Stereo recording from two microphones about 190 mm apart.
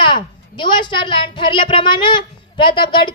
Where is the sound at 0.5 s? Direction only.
25° left (ahead or behind).